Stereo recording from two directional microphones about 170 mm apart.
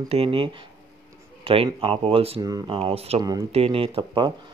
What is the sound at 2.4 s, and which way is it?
Speech, 20° right (ahead or behind).